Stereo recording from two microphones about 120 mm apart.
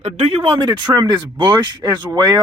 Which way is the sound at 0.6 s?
40° right (ahead or behind).